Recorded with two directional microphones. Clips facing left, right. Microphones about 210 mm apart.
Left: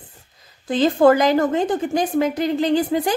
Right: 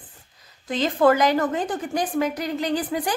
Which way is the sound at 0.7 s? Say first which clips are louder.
Left 5 dB; 30° left (ahead or behind).